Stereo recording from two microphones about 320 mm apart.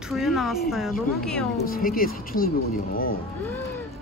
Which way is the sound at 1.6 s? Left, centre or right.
Left.